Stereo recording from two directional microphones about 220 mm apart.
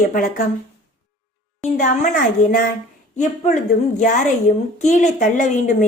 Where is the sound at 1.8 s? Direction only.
35° left (ahead or behind).